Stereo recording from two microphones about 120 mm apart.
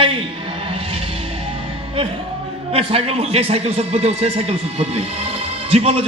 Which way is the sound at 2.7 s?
55° right (ahead or behind).